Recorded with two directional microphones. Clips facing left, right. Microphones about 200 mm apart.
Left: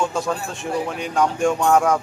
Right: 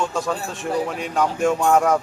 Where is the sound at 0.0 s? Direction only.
Centre (ahead or behind).